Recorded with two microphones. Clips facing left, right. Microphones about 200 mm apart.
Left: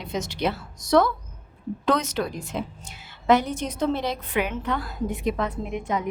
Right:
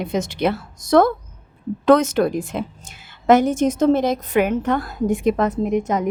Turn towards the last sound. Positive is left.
turn(degrees=-45)  # may be behind; listen again after turning